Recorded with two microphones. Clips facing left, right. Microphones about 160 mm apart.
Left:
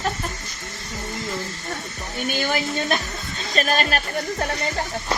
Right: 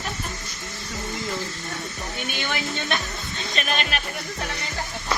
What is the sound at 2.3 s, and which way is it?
A woman's voice, 40° left (ahead or behind).